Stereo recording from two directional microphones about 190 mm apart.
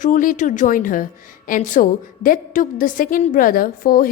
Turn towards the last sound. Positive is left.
turn(degrees=45)  # may be behind; listen again after turning